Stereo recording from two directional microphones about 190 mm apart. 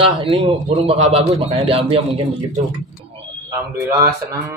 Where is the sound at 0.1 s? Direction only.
30° right (ahead or behind).